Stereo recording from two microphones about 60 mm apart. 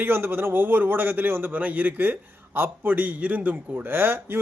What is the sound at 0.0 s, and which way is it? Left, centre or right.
A man's voice, right.